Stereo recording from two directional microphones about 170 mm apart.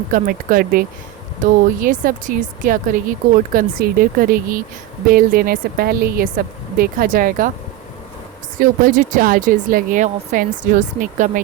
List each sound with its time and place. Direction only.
0.1 s speech: 55° right (ahead or behind)
8.5 s speech: 50° right (ahead or behind)